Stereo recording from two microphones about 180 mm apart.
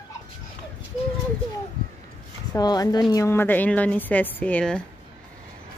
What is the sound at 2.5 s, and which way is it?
A woman's voice, 20° left (ahead or behind).